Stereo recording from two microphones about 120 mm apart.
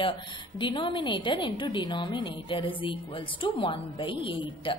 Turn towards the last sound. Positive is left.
turn(degrees=45)  # may be behind; listen again after turning